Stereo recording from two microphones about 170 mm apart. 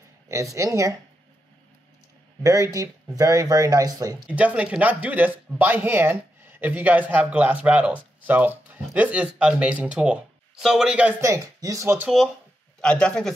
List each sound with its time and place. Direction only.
0.3 s speech: 20° right (ahead or behind)
2.4 s speech: 20° right (ahead or behind)
4.3 s speech: 10° right (ahead or behind)
12.8 s a man's voice: 5° left (ahead or behind)